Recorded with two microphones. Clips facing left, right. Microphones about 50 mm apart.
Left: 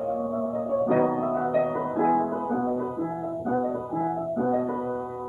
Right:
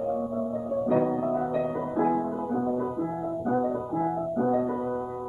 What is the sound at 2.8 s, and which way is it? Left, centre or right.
Music, centre.